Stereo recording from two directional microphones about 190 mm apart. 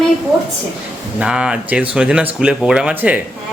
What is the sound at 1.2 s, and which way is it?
A woman's voice, 5° right (ahead or behind).